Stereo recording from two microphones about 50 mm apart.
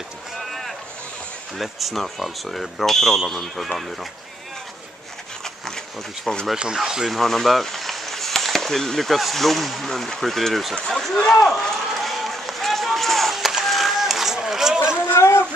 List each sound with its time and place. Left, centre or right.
1.6 s speech: centre
6.3 s speech: centre
6.8 s speech: centre
7.1 s speech: centre
11.2 s run: centre
15.1 s a sound: left